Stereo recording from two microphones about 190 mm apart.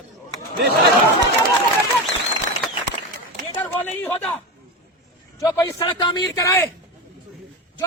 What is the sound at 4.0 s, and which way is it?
Speech, 10° left (ahead or behind).